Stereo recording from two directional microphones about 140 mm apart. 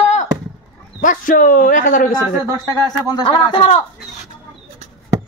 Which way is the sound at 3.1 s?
35° left (ahead or behind).